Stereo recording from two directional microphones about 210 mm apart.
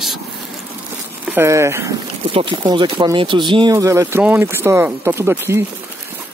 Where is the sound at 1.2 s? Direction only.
10° right (ahead or behind).